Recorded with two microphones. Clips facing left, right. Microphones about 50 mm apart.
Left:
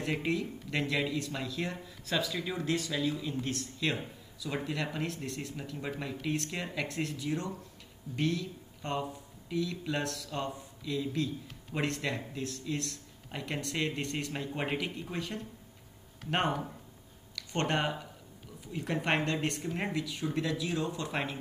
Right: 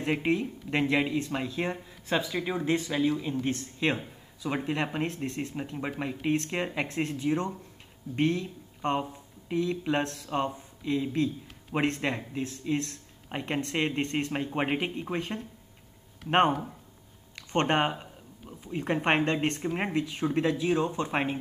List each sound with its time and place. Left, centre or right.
0.0 s speech: right